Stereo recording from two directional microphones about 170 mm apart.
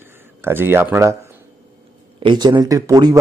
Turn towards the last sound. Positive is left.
turn(degrees=-20)  # may be behind; listen again after turning